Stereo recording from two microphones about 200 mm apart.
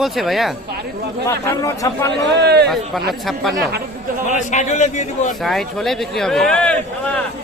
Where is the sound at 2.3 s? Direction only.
55° right (ahead or behind).